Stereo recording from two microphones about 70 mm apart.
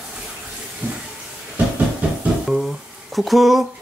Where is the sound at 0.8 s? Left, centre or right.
Right.